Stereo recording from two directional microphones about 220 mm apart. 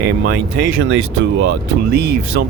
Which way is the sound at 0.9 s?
60° right (ahead or behind).